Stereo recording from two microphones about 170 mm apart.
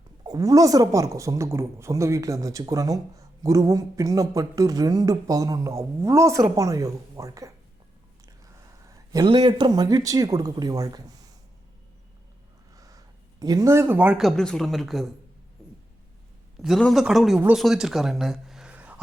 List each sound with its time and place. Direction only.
0.3 s speech: 20° right (ahead or behind)
8.9 s speech: 25° right (ahead or behind)
12.7 s speech: 20° right (ahead or behind); by 15.1 s centre (ahead or behind)
16.6 s a woman's voice: centre (ahead or behind)